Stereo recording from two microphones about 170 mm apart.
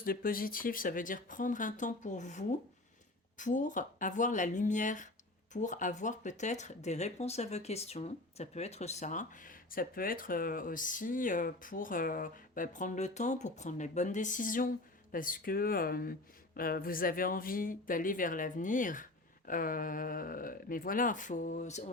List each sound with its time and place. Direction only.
0.0 s speech: 60° left (ahead or behind); by 21.9 s 40° left (ahead or behind)